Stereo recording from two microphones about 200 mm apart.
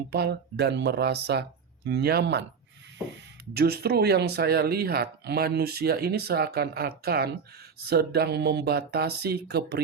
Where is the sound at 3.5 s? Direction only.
50° right (ahead or behind).